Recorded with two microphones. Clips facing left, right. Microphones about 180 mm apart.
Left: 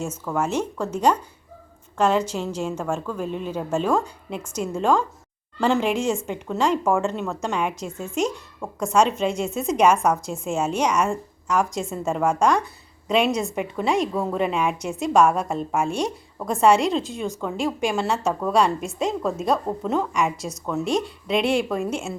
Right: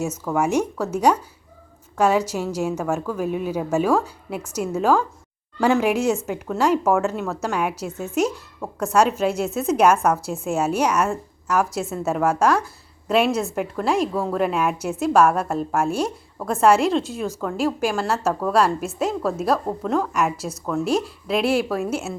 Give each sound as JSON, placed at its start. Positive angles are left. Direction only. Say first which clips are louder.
{"t": 0.3, "sound": "a woman's voice", "louder": "right 3 dB", "side_deg": -10}